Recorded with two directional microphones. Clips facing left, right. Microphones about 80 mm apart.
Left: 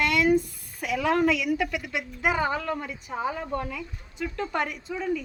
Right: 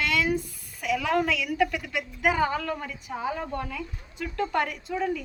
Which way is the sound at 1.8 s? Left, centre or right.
Centre.